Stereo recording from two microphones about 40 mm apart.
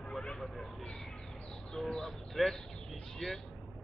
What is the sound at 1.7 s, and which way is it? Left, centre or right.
Speech, centre.